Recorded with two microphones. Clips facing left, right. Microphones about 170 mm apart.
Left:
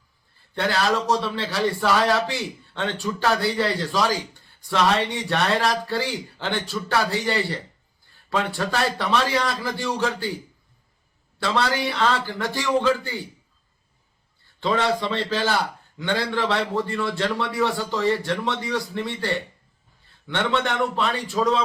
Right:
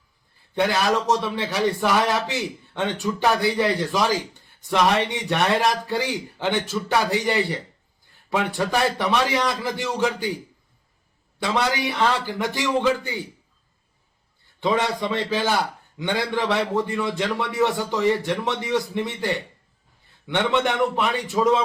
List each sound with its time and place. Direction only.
0.5 s a man's voice: 15° right (ahead or behind)
11.3 s a man's voice: 20° right (ahead or behind)
14.6 s a man's voice: 20° right (ahead or behind)